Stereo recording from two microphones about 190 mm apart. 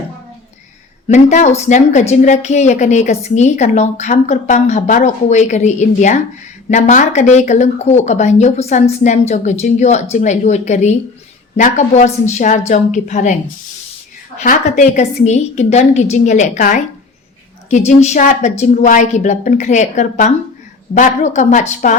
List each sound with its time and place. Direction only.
1.0 s a woman's voice: 40° left (ahead or behind)
14.4 s a woman's voice: 40° left (ahead or behind)